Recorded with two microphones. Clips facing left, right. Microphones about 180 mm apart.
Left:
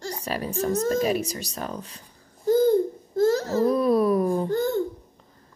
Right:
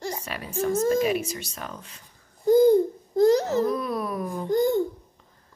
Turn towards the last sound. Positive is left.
turn(degrees=-10)  # may be behind; listen again after turning